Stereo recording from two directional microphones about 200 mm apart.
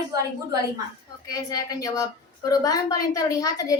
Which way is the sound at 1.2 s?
20° left (ahead or behind).